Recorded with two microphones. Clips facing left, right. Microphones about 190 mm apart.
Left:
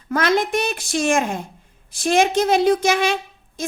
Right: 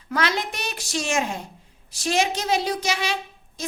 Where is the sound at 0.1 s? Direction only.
50° left (ahead or behind).